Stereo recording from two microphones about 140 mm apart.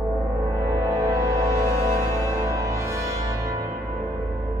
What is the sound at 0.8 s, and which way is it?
Music, 25° right (ahead or behind).